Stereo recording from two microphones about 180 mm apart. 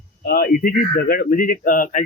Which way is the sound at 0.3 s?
60° left (ahead or behind).